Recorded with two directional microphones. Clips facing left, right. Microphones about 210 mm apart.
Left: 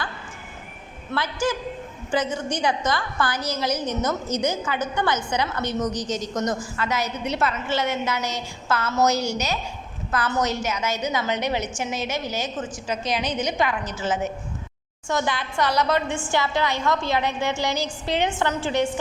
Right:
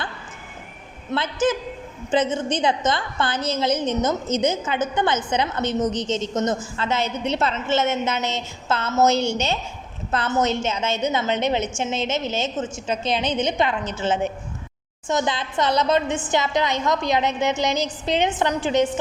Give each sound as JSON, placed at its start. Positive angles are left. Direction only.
{"t": 1.1, "sound": "a woman's voice", "side_deg": -20}